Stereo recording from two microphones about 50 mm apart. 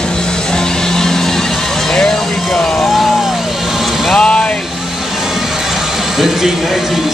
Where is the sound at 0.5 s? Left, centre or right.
Centre.